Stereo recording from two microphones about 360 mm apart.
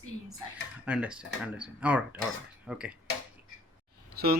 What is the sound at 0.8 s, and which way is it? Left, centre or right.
Speech, centre.